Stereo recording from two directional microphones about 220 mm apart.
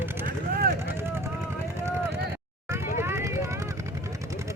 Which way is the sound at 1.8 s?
10° right (ahead or behind).